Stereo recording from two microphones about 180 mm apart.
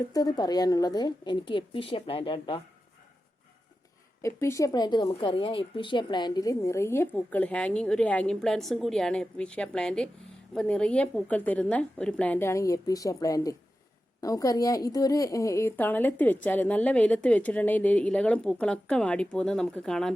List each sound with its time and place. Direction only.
0.0 s a woman's voice: 20° left (ahead or behind)
4.2 s a woman's voice: 15° left (ahead or behind)